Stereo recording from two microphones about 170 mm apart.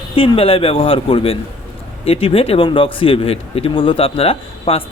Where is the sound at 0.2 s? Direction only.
35° left (ahead or behind).